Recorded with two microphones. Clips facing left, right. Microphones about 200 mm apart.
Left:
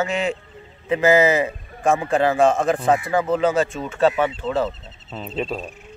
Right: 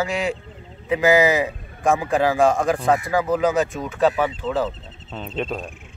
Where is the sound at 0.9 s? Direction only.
15° right (ahead or behind).